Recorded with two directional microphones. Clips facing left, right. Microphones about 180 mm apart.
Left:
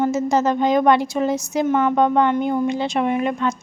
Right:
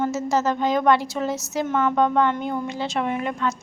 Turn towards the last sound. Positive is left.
turn(degrees=20)  # may be behind; listen again after turning